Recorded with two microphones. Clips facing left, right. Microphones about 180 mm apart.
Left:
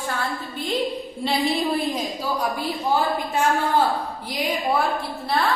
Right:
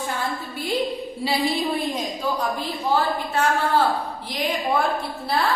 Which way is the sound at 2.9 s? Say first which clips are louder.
Right 1 dB; 15° left (ahead or behind).